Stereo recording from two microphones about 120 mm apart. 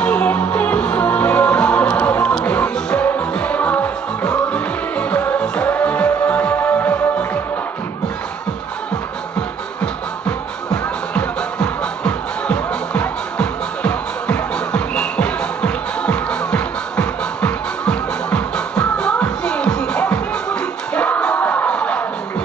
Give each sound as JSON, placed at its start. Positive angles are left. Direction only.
{"t": 0.0, "sound": "music", "side_deg": 10}
{"t": 10.7, "sound": "music", "side_deg": 5}